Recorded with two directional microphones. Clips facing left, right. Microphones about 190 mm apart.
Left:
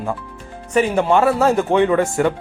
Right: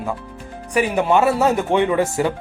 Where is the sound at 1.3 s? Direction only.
20° right (ahead or behind).